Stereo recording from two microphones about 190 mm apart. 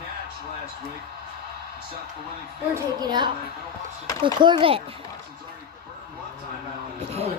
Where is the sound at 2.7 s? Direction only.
20° right (ahead or behind).